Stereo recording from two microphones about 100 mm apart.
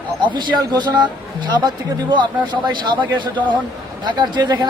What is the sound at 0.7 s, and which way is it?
Speech, 45° right (ahead or behind).